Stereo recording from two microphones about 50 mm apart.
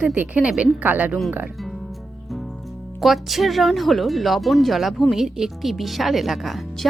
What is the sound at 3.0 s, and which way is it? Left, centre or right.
Speech, centre.